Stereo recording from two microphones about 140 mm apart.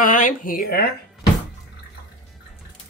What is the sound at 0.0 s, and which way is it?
Speech, 70° left (ahead or behind).